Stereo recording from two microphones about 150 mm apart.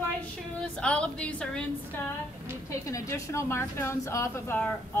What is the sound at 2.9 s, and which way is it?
A woman's voice, 20° left (ahead or behind).